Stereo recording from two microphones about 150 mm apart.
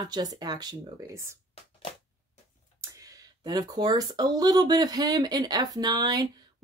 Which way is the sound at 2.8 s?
25° right (ahead or behind).